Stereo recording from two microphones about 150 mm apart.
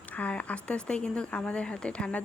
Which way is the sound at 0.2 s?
10° left (ahead or behind).